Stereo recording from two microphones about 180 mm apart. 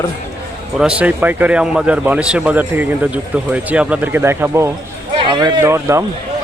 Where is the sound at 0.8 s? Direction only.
5° right (ahead or behind).